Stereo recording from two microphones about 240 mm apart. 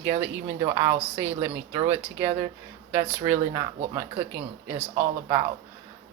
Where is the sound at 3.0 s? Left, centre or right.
Centre.